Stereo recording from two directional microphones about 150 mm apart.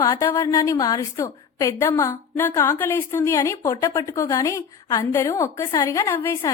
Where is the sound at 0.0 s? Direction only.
20° left (ahead or behind).